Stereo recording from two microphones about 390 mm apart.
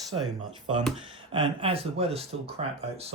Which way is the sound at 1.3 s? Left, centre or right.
Centre.